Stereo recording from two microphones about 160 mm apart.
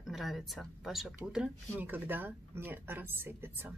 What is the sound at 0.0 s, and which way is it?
Speech, centre (ahead or behind).